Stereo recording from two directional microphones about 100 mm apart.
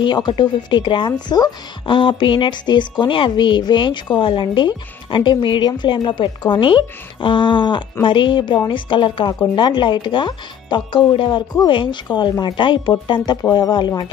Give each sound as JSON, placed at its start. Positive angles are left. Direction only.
{"t": 0.0, "sound": "speech", "side_deg": 50}
{"t": 2.0, "sound": "speech", "side_deg": 55}